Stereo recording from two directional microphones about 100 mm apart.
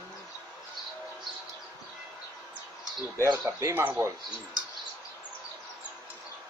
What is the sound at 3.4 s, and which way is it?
Speech, 25° right (ahead or behind).